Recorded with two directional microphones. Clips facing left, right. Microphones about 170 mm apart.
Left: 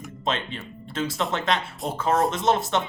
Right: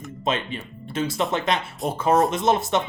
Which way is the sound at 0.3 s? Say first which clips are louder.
Right 2 dB; 15° right (ahead or behind).